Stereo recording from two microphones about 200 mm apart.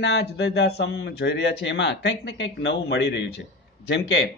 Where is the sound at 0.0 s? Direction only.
60° left (ahead or behind).